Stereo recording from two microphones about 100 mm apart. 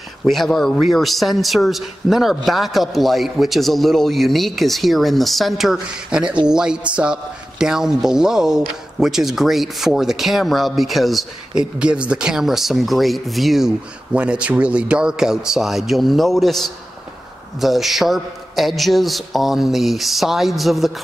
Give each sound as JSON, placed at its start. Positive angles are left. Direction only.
{"t": 0.2, "sound": "speech", "side_deg": 0}